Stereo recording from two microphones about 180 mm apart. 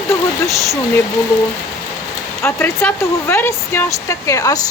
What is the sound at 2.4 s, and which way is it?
Speech, 15° left (ahead or behind).